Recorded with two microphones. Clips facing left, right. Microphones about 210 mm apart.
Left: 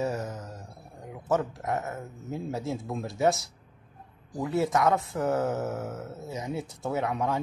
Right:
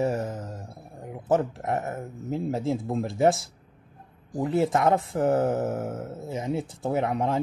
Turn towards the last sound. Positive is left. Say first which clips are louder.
# right 3 dB
turn(degrees=-30)  # may be behind; listen again after turning